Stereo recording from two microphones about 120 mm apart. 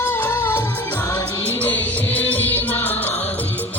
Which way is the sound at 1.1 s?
15° left (ahead or behind).